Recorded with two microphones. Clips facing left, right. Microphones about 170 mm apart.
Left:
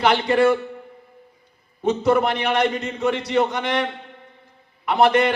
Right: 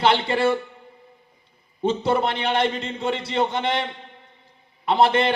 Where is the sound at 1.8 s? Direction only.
30° right (ahead or behind).